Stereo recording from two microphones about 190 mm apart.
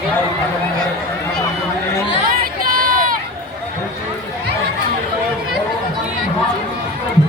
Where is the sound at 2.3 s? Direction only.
50° right (ahead or behind).